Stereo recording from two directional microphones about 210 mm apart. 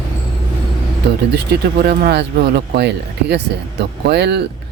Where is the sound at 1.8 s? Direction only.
45° right (ahead or behind).